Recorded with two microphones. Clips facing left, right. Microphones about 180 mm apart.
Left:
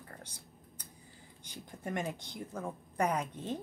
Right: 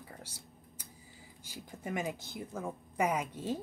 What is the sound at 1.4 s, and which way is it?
A woman's voice, 5° right (ahead or behind).